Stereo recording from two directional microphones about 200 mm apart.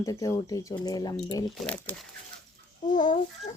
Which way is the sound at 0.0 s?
15° left (ahead or behind).